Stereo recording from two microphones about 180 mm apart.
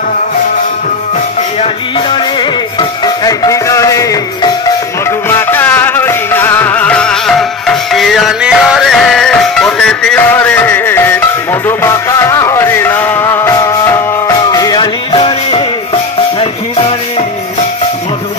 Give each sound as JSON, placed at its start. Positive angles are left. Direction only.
{"t": 1.6, "sound": "music", "side_deg": 30}
{"t": 2.8, "sound": "music", "side_deg": 20}